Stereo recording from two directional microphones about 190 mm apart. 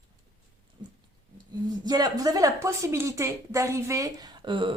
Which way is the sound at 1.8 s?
20° right (ahead or behind).